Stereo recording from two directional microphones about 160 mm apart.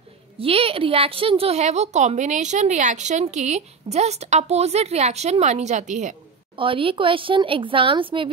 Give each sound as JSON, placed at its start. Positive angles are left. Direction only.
{"t": 0.4, "sound": "a woman's voice", "side_deg": -35}
{"t": 6.5, "sound": "a woman's voice", "side_deg": -35}